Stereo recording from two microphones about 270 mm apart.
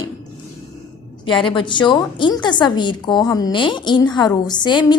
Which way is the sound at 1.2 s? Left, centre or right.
Centre.